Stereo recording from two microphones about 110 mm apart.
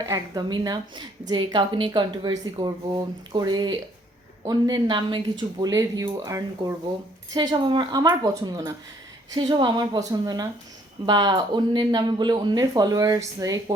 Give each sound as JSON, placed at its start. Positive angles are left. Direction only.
{"t": 0.0, "sound": "speech", "side_deg": -30}
{"t": 7.3, "sound": "speech", "side_deg": -45}